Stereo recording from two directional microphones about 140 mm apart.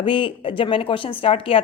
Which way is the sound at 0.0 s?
40° left (ahead or behind).